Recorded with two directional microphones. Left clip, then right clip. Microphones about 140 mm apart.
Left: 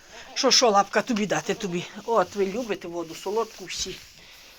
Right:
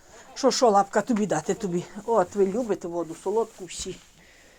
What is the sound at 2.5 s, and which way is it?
Speech, 40° right (ahead or behind).